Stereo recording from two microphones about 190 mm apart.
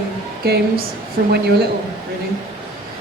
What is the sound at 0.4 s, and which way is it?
Speech, 55° right (ahead or behind).